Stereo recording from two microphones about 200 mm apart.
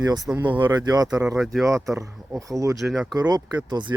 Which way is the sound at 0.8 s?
20° right (ahead or behind).